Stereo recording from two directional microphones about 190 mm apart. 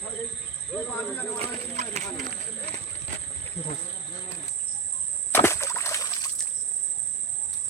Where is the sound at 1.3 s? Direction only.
35° right (ahead or behind).